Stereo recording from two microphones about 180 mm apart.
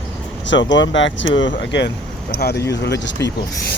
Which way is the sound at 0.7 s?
90° left.